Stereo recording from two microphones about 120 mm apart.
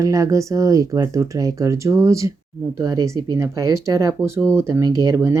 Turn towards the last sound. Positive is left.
turn(degrees=-25)  # may be behind; listen again after turning